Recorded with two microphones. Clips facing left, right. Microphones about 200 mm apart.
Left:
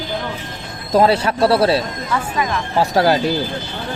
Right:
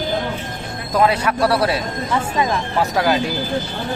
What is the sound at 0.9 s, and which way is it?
Speech, 30° left (ahead or behind).